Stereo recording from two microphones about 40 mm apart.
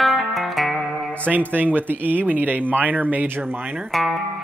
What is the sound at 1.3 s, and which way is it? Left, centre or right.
Speech, right.